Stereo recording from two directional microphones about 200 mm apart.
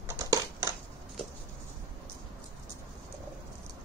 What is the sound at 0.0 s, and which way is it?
Typing, 15° right (ahead or behind).